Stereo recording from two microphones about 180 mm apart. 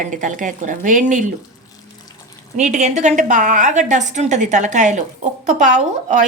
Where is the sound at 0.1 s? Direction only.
45° right (ahead or behind).